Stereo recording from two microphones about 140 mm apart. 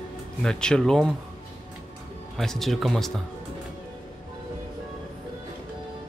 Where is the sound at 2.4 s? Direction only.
Centre (ahead or behind).